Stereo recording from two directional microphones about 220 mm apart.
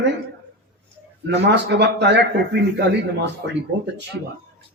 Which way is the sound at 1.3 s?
50° right (ahead or behind).